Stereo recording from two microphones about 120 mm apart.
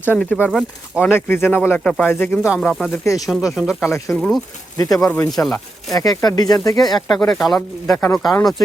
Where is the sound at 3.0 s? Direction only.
25° left (ahead or behind).